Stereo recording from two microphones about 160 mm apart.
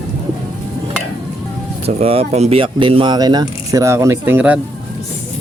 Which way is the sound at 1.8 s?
40° right (ahead or behind).